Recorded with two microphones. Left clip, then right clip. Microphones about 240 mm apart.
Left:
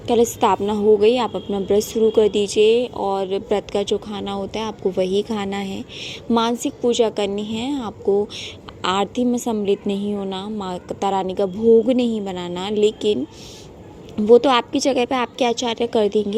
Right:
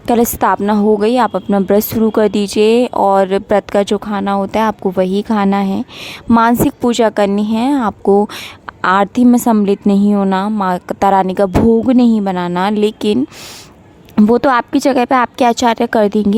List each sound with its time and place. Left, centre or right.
0.1 s speech: right
1.5 s speech: right
1.9 s speech: right
2.6 s speech: right
2.9 s speech: right
6.8 s speech: right
9.8 s speech: right
10.3 s speech: right
14.3 s speech: right